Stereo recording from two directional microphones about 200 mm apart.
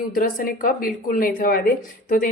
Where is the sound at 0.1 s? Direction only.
45° left (ahead or behind).